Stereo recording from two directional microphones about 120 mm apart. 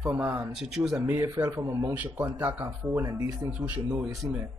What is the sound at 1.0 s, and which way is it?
Speech, 15° right (ahead or behind).